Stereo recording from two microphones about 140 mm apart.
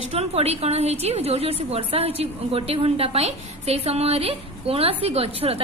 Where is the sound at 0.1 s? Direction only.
45° right (ahead or behind).